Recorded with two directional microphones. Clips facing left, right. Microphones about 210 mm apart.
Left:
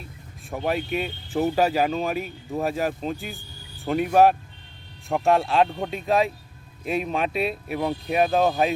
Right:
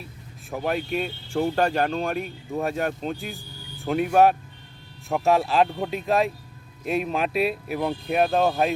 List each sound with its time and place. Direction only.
0.5 s speech: centre (ahead or behind)